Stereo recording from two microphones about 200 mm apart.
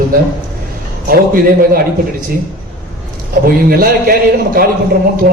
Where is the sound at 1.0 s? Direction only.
45° right (ahead or behind).